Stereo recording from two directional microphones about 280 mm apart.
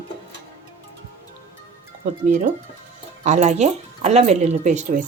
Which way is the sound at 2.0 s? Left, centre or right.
Right.